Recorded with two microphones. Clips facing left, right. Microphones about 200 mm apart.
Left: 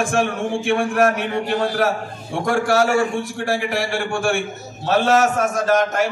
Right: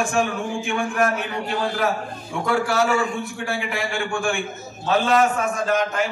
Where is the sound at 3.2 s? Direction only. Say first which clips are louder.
Left 5 dB; 90° left.